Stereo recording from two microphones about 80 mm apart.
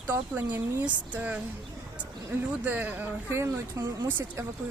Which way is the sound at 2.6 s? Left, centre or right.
Right.